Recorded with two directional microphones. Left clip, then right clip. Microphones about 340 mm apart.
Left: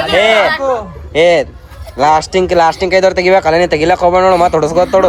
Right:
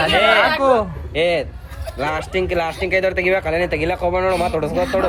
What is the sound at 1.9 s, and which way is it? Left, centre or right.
Speech, centre.